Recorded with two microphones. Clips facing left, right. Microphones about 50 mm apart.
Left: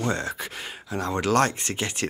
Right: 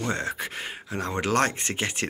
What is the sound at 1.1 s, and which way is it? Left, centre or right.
Speech, right.